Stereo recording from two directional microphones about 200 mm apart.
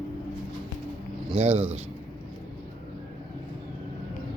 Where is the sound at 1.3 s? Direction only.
30° right (ahead or behind).